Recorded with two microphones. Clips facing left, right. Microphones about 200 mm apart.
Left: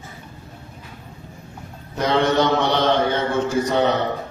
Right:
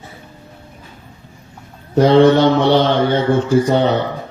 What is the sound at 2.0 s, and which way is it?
Mantra, 30° right (ahead or behind).